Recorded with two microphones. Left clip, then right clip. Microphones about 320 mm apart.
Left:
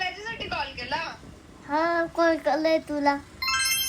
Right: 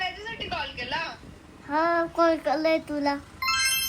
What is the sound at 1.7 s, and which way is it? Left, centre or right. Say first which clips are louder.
A child's voice: even; centre.